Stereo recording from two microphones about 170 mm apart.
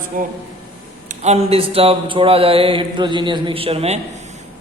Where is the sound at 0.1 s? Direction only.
50° right (ahead or behind).